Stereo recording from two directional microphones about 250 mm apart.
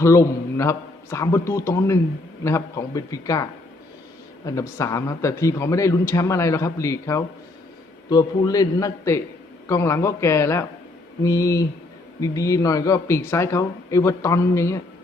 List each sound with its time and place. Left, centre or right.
0.0 s a man's voice: centre
4.4 s a man's voice: centre